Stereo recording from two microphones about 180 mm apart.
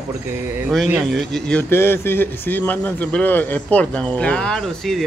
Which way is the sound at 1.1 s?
5° left (ahead or behind).